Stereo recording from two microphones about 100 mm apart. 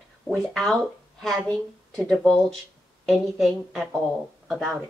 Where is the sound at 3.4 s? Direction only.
Centre (ahead or behind).